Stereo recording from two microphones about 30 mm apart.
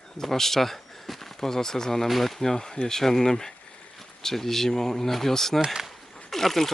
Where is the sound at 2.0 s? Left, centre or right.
Centre.